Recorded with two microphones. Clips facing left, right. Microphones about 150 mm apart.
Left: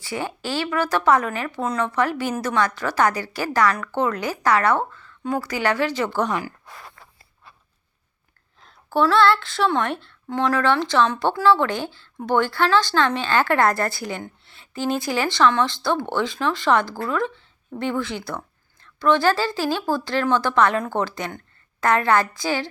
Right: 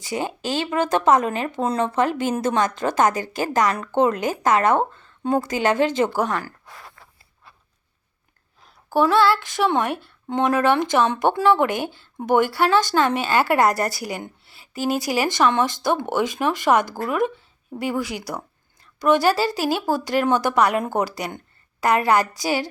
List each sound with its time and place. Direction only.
0.0 s speech: 20° right (ahead or behind)
8.9 s speech: 10° right (ahead or behind)